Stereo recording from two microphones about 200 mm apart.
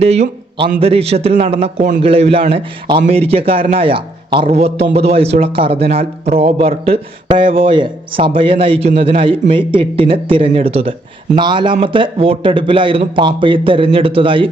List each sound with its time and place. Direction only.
0.0 s a man's voice: 30° right (ahead or behind)